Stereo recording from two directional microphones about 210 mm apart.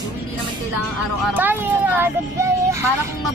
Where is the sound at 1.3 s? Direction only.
10° right (ahead or behind).